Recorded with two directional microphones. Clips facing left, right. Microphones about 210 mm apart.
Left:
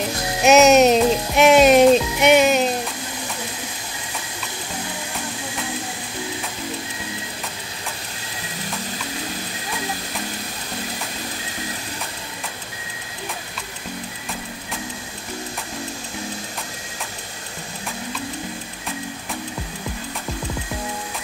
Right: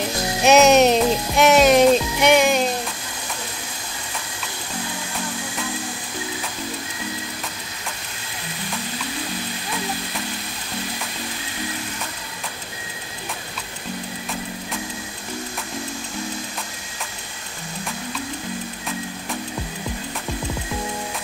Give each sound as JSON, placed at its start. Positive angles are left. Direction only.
{"t": 0.4, "sound": "music", "side_deg": 0}
{"t": 1.4, "sound": "music", "side_deg": 25}